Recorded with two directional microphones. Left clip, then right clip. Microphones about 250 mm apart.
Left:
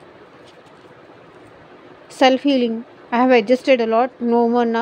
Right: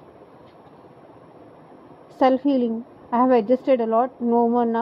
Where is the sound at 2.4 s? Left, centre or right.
Centre.